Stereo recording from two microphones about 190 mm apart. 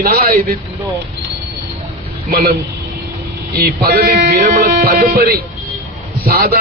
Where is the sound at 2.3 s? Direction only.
55° right (ahead or behind).